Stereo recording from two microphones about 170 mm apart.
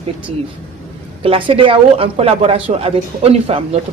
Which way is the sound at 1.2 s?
35° right (ahead or behind).